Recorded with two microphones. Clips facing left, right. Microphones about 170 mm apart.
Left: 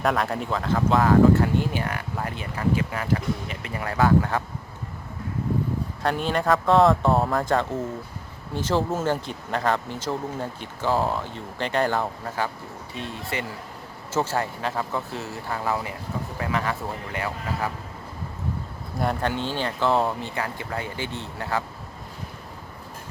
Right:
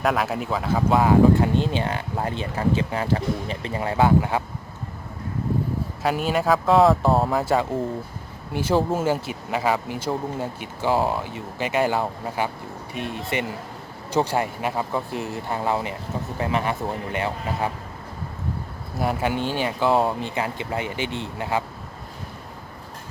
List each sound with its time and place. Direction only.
0.0 s speech: centre (ahead or behind)
6.0 s speech: 5° right (ahead or behind); by 17.7 s 25° right (ahead or behind)
18.9 s speech: 5° right (ahead or behind)